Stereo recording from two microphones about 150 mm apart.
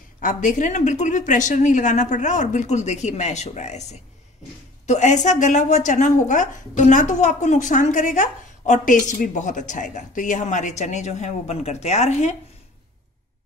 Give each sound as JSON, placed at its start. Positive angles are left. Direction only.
{"t": 0.2, "sound": "speech", "side_deg": 60}
{"t": 4.8, "sound": "a woman's voice", "side_deg": 50}